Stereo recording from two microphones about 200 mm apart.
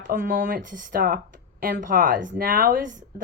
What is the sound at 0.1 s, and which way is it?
Speech, 45° right (ahead or behind).